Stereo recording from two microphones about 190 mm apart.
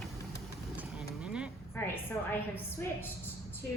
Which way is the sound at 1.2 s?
5° right (ahead or behind).